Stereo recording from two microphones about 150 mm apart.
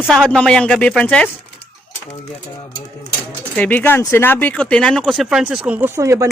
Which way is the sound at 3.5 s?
10° left (ahead or behind).